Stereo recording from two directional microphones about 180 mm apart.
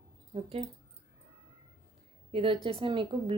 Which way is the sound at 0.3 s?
35° right (ahead or behind).